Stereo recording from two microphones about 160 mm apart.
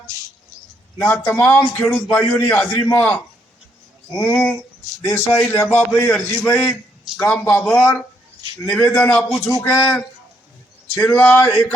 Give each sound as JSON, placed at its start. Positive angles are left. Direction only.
{"t": 0.9, "sound": "a man's voice", "side_deg": 15}
{"t": 10.9, "sound": "a man's voice", "side_deg": 15}